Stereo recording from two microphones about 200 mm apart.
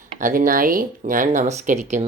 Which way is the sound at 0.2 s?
40° right (ahead or behind).